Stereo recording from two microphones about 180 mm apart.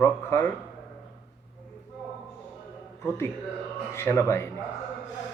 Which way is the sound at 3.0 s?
10° left (ahead or behind).